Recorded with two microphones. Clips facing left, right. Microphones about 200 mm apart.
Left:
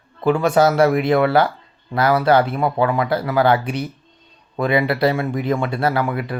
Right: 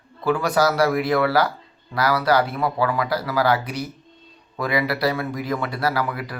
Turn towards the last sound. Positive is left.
turn(degrees=25)  # may be behind; listen again after turning